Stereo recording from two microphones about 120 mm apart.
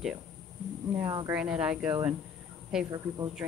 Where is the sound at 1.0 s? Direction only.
25° right (ahead or behind).